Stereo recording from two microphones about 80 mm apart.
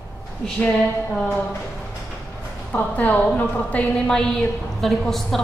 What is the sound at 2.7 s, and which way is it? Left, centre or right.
A woman's voice, centre.